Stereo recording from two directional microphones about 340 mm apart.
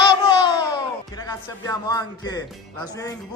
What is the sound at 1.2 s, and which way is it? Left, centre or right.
A man's voice, centre.